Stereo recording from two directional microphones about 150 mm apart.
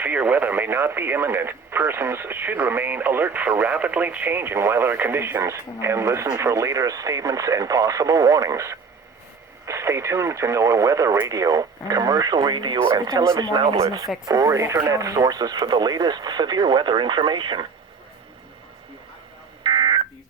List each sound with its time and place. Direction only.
0.0 s speech: 10° right (ahead or behind); by 17.7 s 30° right (ahead or behind)
19.6 s telephone dialing: 30° right (ahead or behind)